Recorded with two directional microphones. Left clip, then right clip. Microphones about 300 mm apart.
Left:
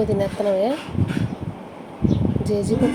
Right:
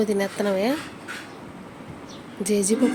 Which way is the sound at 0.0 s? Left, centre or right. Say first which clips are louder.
Left 3 dB; centre.